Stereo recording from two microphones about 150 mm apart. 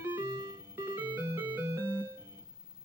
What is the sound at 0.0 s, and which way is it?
Music, 20° right (ahead or behind).